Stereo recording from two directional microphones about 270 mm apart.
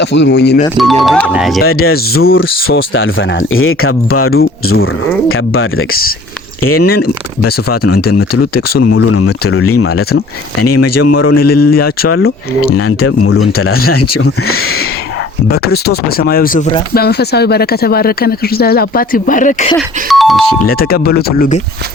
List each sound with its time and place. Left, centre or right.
0.0 s speech: left
1.3 s speech: centre
1.7 s speech: left
2.2 s speech: left
6.6 s speech: left
6.9 s speech: left
8.8 s speech: left
15.4 s speech: left
20.1 s speech: centre
20.6 s speech: left